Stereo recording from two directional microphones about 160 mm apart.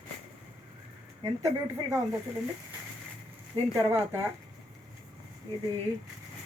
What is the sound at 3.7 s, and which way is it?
Speech, 20° right (ahead or behind).